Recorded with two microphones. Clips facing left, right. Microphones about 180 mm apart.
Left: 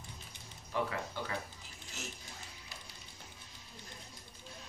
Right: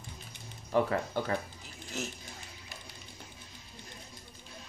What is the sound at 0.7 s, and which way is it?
Speech, 50° right (ahead or behind).